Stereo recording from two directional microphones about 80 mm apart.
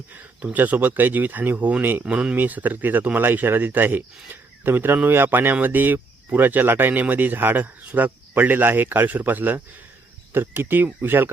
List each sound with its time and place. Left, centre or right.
0.5 s speech: right